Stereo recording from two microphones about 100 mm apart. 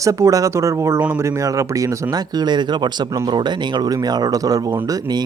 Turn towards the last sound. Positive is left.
turn(degrees=-45)  # may be behind; listen again after turning